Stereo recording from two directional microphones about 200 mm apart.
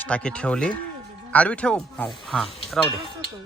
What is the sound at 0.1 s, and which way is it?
A woman's voice, 5° left (ahead or behind).